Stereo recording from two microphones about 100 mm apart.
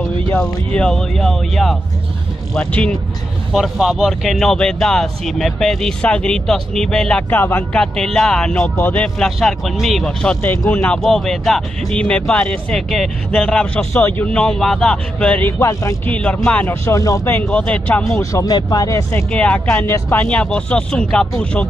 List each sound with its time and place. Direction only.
0.4 s speech: 5° left (ahead or behind)
3.5 s speech: centre (ahead or behind)
7.2 s speech: 20° left (ahead or behind)
7.7 s speech: 5° left (ahead or behind)
9.4 s speech: centre (ahead or behind)
10.6 s speech: 15° left (ahead or behind)
13.9 s speech: 20° left (ahead or behind)
15.6 s speech: 30° left (ahead or behind)
16.1 s speech: 15° left (ahead or behind)
16.6 s speech: 30° left (ahead or behind)
17.4 s speech: 15° left (ahead or behind)
18.3 s speech: 40° left (ahead or behind)
19.3 s speech: 15° left (ahead or behind)
20.2 s speech: 10° left (ahead or behind)